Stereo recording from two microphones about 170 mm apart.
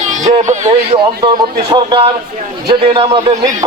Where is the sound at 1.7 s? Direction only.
30° right (ahead or behind).